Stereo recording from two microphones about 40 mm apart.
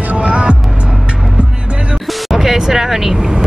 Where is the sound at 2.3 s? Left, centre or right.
Centre.